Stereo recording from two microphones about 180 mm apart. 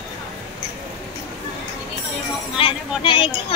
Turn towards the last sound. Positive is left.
turn(degrees=30)  # may be behind; listen again after turning